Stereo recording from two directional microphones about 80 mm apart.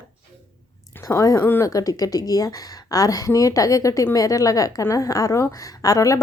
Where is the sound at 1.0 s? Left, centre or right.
Left.